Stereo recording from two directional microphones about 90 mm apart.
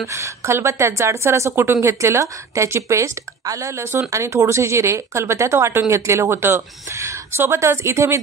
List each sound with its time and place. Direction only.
0.0 s a woman's voice: 30° right (ahead or behind)